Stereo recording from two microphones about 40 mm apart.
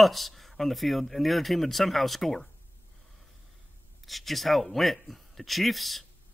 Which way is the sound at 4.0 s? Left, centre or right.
Centre.